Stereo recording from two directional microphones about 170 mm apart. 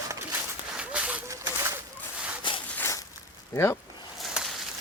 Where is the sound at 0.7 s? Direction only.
5° right (ahead or behind).